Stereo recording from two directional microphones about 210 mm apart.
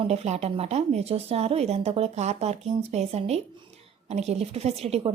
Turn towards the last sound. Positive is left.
turn(degrees=-30)  # may be behind; listen again after turning